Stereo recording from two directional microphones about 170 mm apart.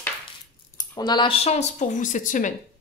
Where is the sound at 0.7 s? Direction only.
25° left (ahead or behind); by 2.5 s 50° left (ahead or behind).